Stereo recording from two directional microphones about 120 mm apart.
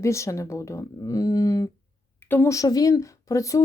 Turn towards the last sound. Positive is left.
turn(degrees=25)  # may be behind; listen again after turning